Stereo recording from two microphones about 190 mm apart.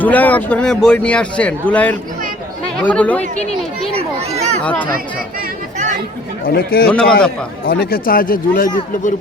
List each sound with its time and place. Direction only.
0.0 s a man's voice: 10° left (ahead or behind)
3.9 s a sound: 35° right (ahead or behind)
4.6 s a man's voice: 10° left (ahead or behind)
6.4 s speech: 50° left (ahead or behind)
6.8 s a man's voice: 5° left (ahead or behind)
7.6 s speech: 50° left (ahead or behind)